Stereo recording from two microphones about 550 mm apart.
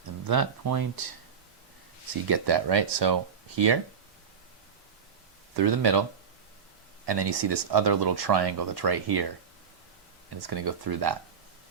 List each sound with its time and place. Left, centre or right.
0.3 s speech: right
2.2 s speech: right
5.5 s speech: right
7.0 s speech: right
10.4 s speech: right